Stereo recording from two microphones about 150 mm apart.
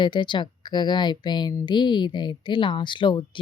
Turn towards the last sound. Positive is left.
turn(degrees=35)  # may be behind; listen again after turning